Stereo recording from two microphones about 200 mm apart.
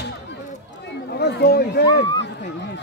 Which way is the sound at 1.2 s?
55° left (ahead or behind).